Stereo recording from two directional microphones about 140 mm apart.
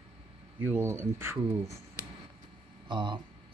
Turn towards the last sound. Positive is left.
turn(degrees=-35)  # may be behind; listen again after turning